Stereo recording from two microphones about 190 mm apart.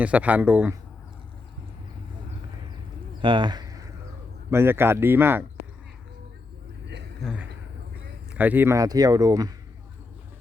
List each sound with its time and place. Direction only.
0.0 s speech: 5° right (ahead or behind)
3.2 s bird: 25° right (ahead or behind)
4.5 s speech: 10° right (ahead or behind)
7.2 s a man's voice: 5° right (ahead or behind); by 9.5 s 20° right (ahead or behind)